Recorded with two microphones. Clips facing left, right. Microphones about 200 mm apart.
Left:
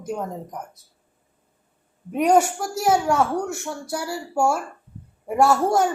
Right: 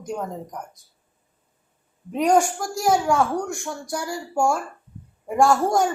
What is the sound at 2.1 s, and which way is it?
A woman's voice, 5° left (ahead or behind).